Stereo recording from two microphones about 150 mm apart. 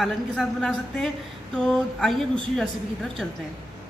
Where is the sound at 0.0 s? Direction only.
Centre (ahead or behind).